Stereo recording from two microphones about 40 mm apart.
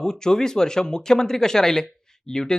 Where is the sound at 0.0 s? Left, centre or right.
Centre.